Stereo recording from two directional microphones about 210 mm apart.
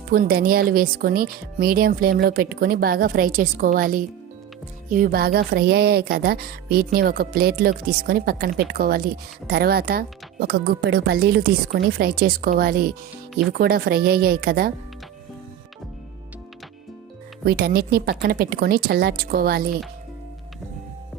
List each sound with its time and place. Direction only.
0.1 s music: 45° right (ahead or behind)
17.4 s music: 50° right (ahead or behind)